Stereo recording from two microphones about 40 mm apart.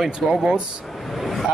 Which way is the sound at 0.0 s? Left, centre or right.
Centre.